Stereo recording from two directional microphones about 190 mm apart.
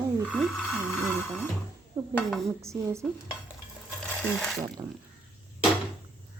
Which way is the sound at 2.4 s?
15° right (ahead or behind).